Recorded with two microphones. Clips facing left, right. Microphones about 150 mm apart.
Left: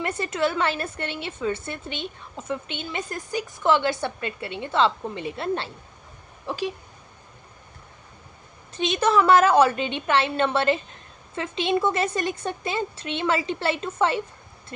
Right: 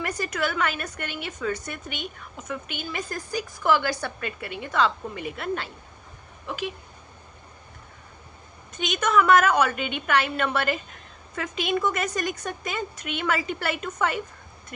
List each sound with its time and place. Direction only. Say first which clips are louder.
0.0 s a woman's voice: left 3 dB; 25° left (ahead or behind)
8.7 s a woman's voice: left 2 dB; 30° left (ahead or behind)